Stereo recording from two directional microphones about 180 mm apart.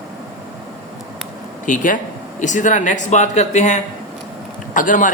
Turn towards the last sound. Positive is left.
turn(degrees=45)  # may be behind; listen again after turning